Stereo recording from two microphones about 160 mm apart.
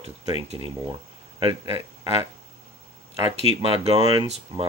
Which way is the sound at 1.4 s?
35° right (ahead or behind).